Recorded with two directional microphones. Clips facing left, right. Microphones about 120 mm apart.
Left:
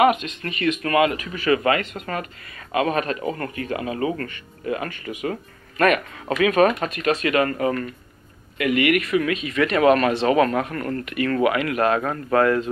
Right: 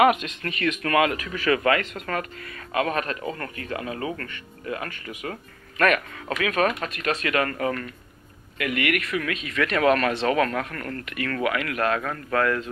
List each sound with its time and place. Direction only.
0.4 s speech: 5° left (ahead or behind); by 7.1 s 25° left (ahead or behind)
7.1 s speech: 10° left (ahead or behind)